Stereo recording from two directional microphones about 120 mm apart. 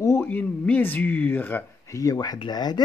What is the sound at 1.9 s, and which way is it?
Speech, 30° left (ahead or behind).